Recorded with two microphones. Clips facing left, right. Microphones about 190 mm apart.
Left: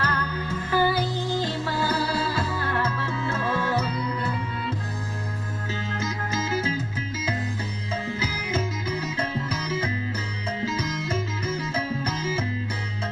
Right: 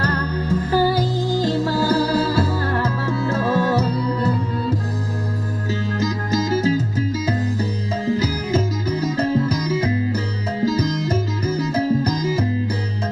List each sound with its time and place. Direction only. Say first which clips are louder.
0.0 s music: right 6 dB; 40° right (ahead or behind)
5.9 s music: right 8 dB; 40° right (ahead or behind)